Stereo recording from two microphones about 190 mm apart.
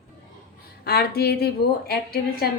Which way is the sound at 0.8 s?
55° left (ahead or behind).